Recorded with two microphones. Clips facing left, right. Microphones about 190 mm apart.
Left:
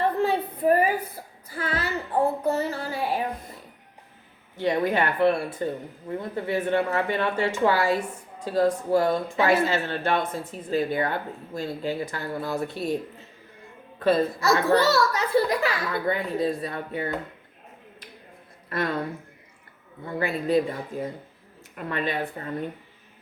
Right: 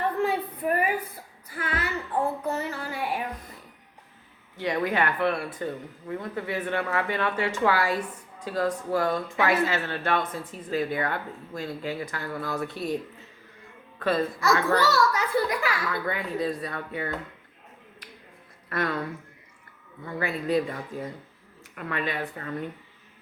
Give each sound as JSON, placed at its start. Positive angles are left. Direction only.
{"t": 0.0, "sound": "a sound", "side_deg": 30}
{"t": 4.5, "sound": "speech", "side_deg": 30}
{"t": 14.0, "sound": "speech", "side_deg": 30}
{"t": 18.7, "sound": "speech", "side_deg": 25}
{"t": 20.1, "sound": "speech", "side_deg": 25}